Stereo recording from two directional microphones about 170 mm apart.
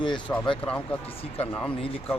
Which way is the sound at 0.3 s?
20° left (ahead or behind).